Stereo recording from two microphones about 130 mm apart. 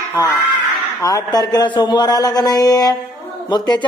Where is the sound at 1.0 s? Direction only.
30° left (ahead or behind).